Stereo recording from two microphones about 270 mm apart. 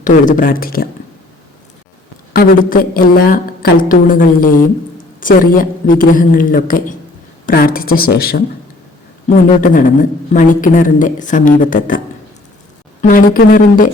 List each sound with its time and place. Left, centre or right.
0.0 s speech: left
2.3 s a woman's voice: left
13.0 s speech: left